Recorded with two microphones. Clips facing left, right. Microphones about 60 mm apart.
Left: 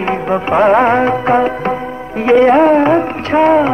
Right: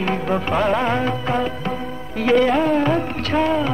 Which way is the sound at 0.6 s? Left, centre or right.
Left.